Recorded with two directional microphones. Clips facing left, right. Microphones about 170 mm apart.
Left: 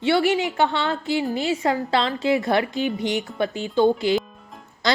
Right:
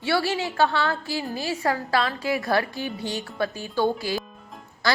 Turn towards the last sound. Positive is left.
turn(degrees=20)  # may be behind; listen again after turning